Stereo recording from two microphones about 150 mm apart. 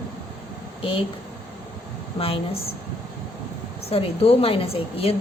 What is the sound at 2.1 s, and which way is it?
Speech, 40° left (ahead or behind).